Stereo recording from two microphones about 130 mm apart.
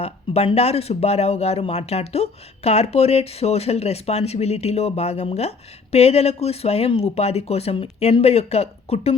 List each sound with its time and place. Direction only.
0.0 s speech: 50° left (ahead or behind)